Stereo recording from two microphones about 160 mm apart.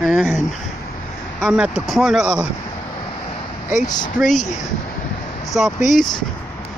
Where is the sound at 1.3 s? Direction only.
5° right (ahead or behind).